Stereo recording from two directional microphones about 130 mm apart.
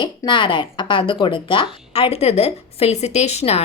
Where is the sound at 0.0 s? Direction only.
40° left (ahead or behind).